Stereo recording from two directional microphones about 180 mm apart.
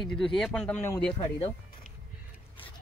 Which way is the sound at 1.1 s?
30° left (ahead or behind).